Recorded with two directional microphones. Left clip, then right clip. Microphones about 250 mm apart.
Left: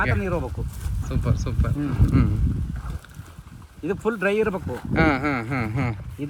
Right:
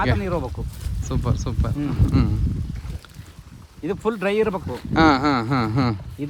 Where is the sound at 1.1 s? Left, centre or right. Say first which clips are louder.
Right 2 dB; centre.